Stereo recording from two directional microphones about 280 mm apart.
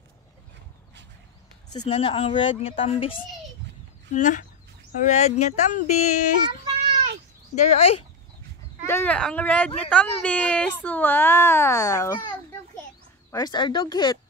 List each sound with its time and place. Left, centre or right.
1.9 s speech: left
6.6 s a sound: right
7.5 s speech: left
8.8 s a child's voice: centre